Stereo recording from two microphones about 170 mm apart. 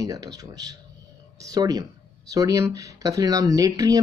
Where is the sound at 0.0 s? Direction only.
20° right (ahead or behind).